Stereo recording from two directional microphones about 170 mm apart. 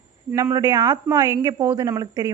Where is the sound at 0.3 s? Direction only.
15° right (ahead or behind).